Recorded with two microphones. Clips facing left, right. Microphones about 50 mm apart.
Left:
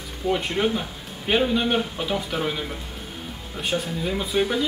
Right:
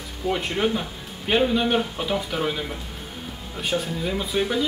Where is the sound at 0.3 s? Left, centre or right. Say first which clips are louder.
Left 1 dB; centre.